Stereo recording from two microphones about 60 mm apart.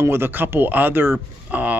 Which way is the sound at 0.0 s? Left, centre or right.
Right.